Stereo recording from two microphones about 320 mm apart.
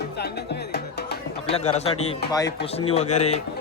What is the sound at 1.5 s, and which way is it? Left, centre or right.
Speech, centre.